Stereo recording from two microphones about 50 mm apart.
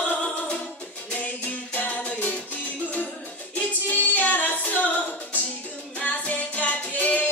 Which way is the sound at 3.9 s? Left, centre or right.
Left.